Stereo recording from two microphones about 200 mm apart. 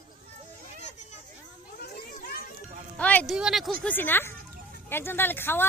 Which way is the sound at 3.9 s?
10° left (ahead or behind).